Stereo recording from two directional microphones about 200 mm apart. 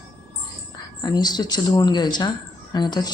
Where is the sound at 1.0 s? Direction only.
20° left (ahead or behind).